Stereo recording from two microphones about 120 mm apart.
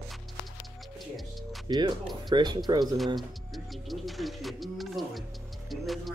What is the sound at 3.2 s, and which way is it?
Speech, centre (ahead or behind).